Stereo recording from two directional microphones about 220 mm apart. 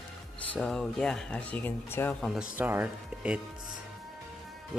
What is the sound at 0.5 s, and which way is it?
Speech, 5° left (ahead or behind).